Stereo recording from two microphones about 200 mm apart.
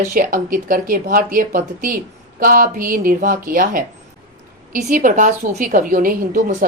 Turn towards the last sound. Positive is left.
turn(degrees=-45)  # may be behind; listen again after turning